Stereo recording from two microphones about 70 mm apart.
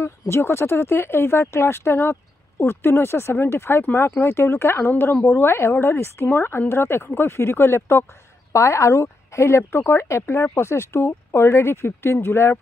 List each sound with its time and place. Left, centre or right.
0.0 s speech: left